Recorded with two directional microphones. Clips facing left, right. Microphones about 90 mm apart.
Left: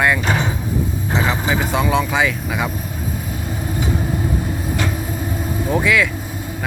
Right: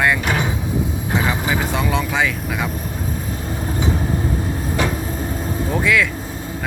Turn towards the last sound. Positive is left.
turn(degrees=0)  # may be behind; listen again after turning